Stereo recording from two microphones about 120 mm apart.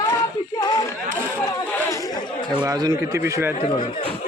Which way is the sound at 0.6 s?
35° left (ahead or behind).